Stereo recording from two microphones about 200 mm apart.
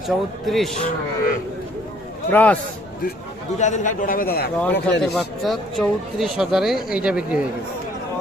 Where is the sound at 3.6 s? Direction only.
35° left (ahead or behind).